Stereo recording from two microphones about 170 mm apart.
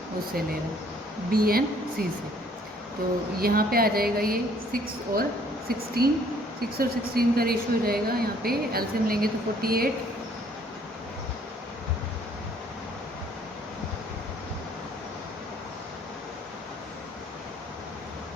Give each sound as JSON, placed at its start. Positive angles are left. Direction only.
{"t": 1.3, "sound": "speech", "side_deg": -60}
{"t": 3.4, "sound": "speech", "side_deg": -60}